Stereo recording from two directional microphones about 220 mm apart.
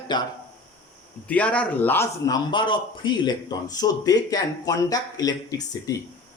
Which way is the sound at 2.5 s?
20° left (ahead or behind).